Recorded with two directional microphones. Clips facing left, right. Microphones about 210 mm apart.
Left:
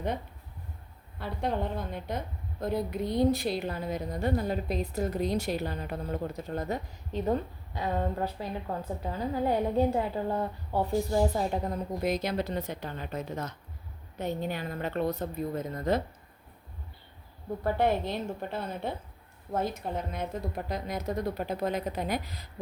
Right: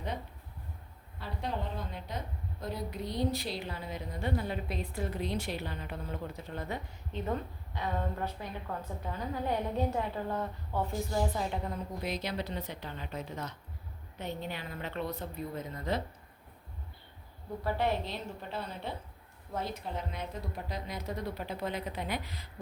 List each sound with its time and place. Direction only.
1.2 s a woman's voice: 55° left (ahead or behind)
17.6 s a woman's voice: 50° left (ahead or behind)